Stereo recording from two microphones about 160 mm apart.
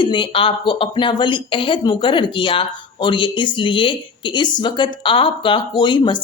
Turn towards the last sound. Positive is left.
turn(degrees=30)  # may be behind; listen again after turning